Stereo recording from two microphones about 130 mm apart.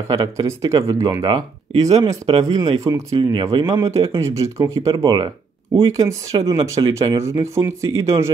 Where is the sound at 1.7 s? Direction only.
60° right (ahead or behind).